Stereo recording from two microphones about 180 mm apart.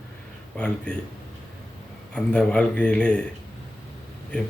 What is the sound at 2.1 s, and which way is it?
Speech, 5° left (ahead or behind).